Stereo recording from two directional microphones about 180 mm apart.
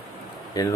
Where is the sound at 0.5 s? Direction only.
20° left (ahead or behind).